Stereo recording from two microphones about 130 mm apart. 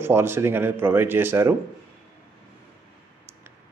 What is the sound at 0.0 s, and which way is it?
Speech, 20° right (ahead or behind).